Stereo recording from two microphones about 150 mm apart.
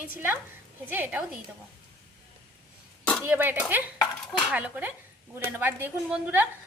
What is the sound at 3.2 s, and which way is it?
A woman's voice, 10° right (ahead or behind).